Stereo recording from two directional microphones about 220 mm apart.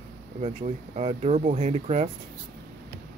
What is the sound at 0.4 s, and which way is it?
Speech, 30° right (ahead or behind).